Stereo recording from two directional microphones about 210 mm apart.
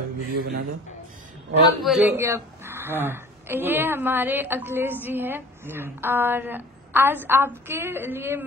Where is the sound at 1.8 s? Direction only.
Centre (ahead or behind).